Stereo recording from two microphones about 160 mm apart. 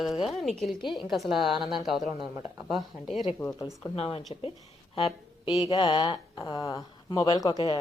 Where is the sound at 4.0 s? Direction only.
35° left (ahead or behind).